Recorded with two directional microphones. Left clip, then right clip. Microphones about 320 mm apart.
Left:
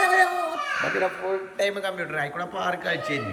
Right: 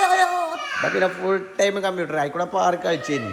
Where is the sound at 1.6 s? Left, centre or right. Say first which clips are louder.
Right 4 dB; right.